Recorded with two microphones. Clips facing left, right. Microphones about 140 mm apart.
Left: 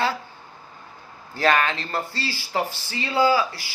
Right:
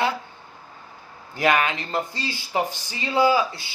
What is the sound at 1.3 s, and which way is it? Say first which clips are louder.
Speech: even; 15° right (ahead or behind).